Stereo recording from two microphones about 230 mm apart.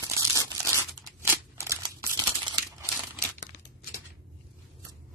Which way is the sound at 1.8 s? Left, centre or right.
Centre.